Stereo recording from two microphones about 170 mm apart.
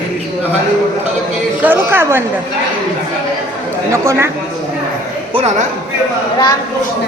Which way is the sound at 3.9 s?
15° right (ahead or behind).